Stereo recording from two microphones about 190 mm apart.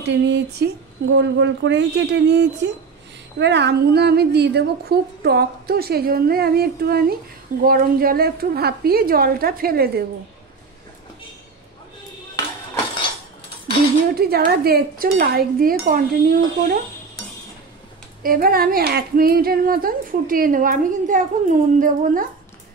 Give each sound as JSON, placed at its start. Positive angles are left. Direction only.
{"t": 0.0, "sound": "a woman's voice", "side_deg": -70}
{"t": 14.1, "sound": "a woman's voice", "side_deg": -55}
{"t": 18.2, "sound": "speech", "side_deg": -50}